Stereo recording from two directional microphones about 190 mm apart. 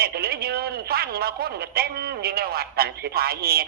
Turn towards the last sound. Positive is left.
turn(degrees=-55)  # may be behind; listen again after turning